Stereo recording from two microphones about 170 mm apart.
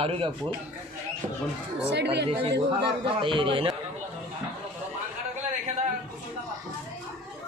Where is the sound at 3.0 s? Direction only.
30° right (ahead or behind).